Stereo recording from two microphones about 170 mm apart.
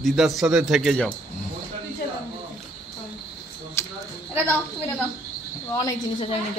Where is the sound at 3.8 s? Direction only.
15° left (ahead or behind).